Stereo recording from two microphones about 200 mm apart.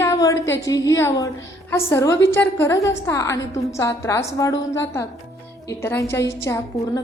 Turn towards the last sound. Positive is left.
turn(degrees=15)  # may be behind; listen again after turning